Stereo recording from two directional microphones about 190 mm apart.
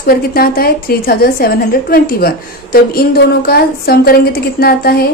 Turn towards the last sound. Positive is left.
turn(degrees=55)  # may be behind; listen again after turning